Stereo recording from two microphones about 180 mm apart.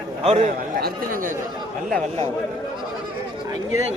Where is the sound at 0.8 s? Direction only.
55° right (ahead or behind).